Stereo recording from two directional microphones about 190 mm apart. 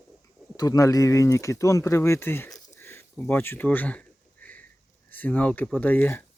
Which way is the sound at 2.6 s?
15° left (ahead or behind).